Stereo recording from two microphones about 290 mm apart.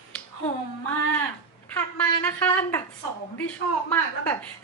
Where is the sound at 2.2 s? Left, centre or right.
Centre.